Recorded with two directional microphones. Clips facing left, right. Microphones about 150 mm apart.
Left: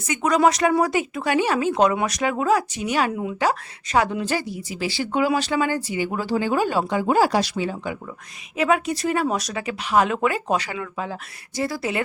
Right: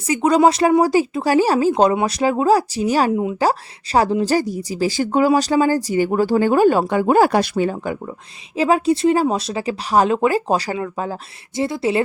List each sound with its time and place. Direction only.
0.1 s a woman's voice: 30° right (ahead or behind)
3.1 s speech: 25° right (ahead or behind)
3.4 s a woman's voice: 35° right (ahead or behind)
8.5 s a woman's voice: 30° right (ahead or behind)
11.5 s speech: 25° right (ahead or behind)